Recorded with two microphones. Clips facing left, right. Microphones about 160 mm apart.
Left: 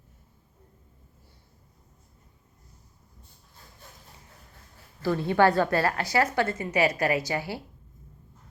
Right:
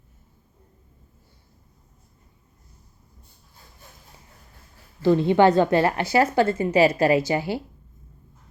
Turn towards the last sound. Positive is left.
turn(degrees=-25)  # may be behind; listen again after turning